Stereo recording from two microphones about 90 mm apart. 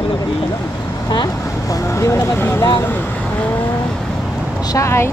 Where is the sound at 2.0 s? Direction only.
30° left (ahead or behind).